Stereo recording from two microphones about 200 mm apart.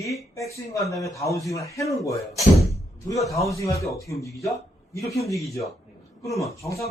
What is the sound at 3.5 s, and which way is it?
A man's voice, 15° left (ahead or behind).